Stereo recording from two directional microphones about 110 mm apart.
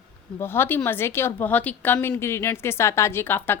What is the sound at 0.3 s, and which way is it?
A woman's voice, 20° left (ahead or behind).